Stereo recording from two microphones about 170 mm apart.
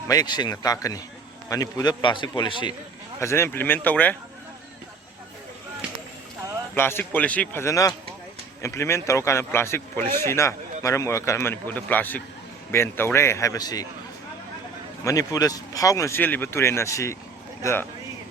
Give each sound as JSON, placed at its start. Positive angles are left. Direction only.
{"t": 0.1, "sound": "a man's voice", "side_deg": 25}
{"t": 3.2, "sound": "speech", "side_deg": 15}
{"t": 6.7, "sound": "speech", "side_deg": 15}
{"t": 15.0, "sound": "speech", "side_deg": 20}